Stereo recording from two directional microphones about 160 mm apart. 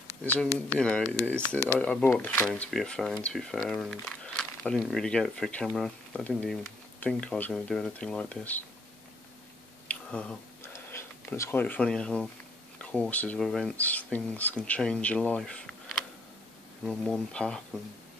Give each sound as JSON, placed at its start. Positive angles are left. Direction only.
{"t": 0.2, "sound": "speech", "side_deg": 10}
{"t": 9.8, "sound": "finger snapping", "side_deg": 5}
{"t": 10.9, "sound": "speech", "side_deg": 15}
{"t": 16.8, "sound": "speech", "side_deg": 5}